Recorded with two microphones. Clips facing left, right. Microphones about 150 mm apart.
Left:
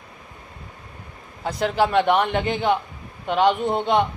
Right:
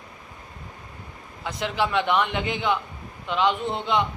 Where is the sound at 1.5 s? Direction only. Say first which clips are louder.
Left 5 dB; 40° left (ahead or behind).